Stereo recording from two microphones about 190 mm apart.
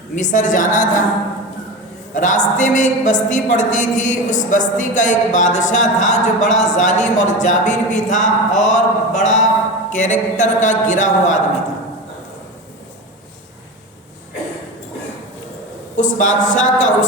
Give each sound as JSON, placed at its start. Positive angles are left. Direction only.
{"t": 0.2, "sound": "a woman's voice", "side_deg": 40}
{"t": 2.1, "sound": "a woman's voice", "side_deg": 40}
{"t": 16.0, "sound": "a woman's voice", "side_deg": 40}